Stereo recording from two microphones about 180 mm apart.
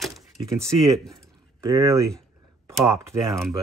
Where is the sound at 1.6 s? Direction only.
15° right (ahead or behind).